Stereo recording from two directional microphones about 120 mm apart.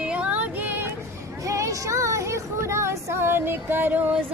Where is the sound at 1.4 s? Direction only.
25° right (ahead or behind).